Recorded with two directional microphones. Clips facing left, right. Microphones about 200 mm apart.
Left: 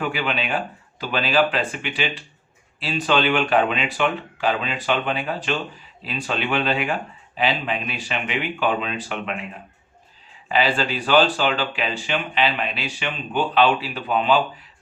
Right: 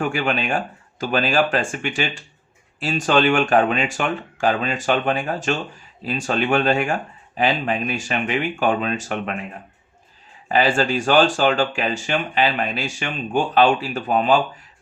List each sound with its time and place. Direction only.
0.0 s speech: 45° right (ahead or behind)
10.5 s speech: 45° right (ahead or behind)